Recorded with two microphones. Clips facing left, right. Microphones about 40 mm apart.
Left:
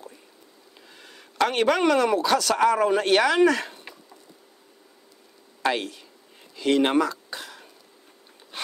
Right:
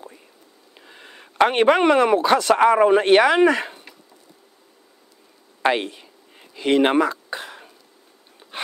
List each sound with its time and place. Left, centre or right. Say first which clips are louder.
0.8 s speech: right 5 dB; right
5.6 s speech: right 5 dB; right
6.5 s a sound: right 3 dB; right